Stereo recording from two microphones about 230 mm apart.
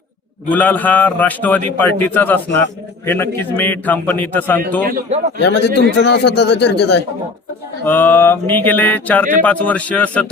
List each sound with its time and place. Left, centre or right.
0.5 s a man's voice: centre
4.9 s speech: right
5.4 s speech: left
7.9 s a man's voice: centre